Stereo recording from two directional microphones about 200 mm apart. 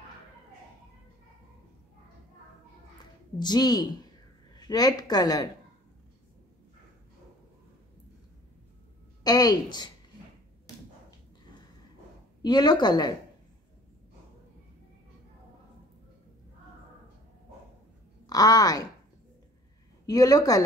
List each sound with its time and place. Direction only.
3.3 s speech: 20° left (ahead or behind)
9.2 s speech: 20° left (ahead or behind)
12.4 s speech: 20° left (ahead or behind)
18.2 s speech: 20° left (ahead or behind)
20.1 s speech: 20° left (ahead or behind)